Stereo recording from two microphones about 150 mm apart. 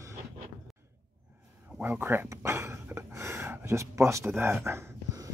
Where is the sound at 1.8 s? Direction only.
15° right (ahead or behind).